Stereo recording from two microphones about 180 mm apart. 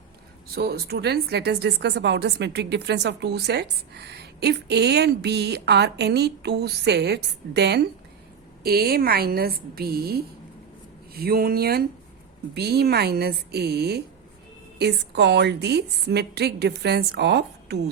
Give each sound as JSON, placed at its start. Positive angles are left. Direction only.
{"t": 0.5, "sound": "a woman's voice", "side_deg": -60}